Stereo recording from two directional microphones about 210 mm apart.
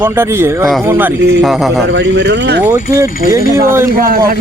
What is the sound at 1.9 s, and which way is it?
Speech, 55° right (ahead or behind).